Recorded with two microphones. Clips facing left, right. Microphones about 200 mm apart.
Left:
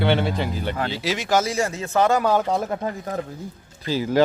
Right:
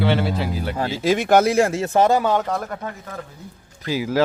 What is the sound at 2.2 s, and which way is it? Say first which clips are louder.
Speech: even; centre (ahead or behind).